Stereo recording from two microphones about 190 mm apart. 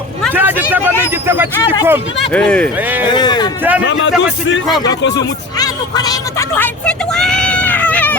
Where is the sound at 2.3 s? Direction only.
5° left (ahead or behind).